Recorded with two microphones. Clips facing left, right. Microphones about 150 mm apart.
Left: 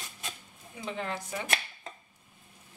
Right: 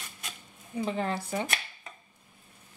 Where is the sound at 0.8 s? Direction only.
40° right (ahead or behind).